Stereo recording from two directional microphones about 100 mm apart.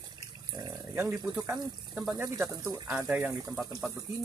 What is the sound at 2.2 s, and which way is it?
Speech, 25° right (ahead or behind).